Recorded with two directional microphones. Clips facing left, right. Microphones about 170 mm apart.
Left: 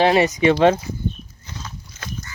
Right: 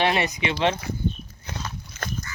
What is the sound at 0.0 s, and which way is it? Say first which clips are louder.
Speech: left 8 dB; 35° left (ahead or behind).